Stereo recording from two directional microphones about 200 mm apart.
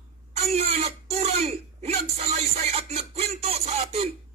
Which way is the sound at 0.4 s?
30° right (ahead or behind).